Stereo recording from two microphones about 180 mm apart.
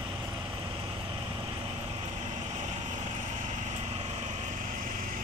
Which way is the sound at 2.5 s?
40° right (ahead or behind).